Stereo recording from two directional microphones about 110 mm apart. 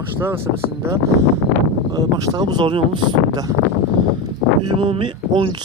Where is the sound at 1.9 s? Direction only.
40° right (ahead or behind).